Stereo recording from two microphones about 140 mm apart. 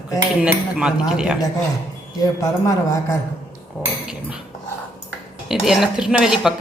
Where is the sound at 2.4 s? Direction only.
20° left (ahead or behind).